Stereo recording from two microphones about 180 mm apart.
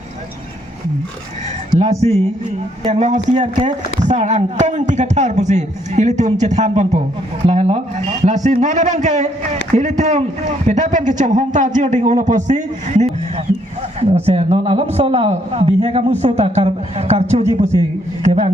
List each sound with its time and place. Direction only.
1.8 s a man's voice: 35° right (ahead or behind)
14.0 s a man's voice: 35° right (ahead or behind)